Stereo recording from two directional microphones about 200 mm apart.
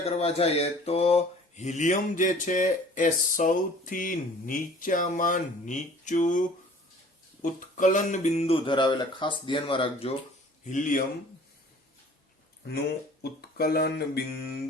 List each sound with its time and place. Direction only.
0.0 s mantra: 30° left (ahead or behind)
7.8 s speech: 40° left (ahead or behind)
10.7 s mantra: 40° left (ahead or behind)
13.4 s speech: 50° left (ahead or behind)